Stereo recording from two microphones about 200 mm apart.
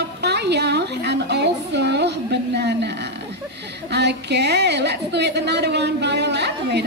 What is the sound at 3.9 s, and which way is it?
A woman's voice, 55° right (ahead or behind).